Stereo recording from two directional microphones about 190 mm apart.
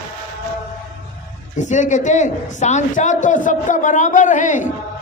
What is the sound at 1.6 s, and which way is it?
A man's voice, 40° left (ahead or behind).